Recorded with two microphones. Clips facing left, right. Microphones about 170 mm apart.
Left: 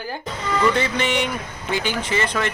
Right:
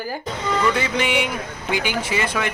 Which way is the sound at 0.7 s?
10° right (ahead or behind).